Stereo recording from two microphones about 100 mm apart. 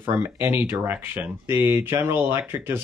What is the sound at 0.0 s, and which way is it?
Speech, 25° right (ahead or behind).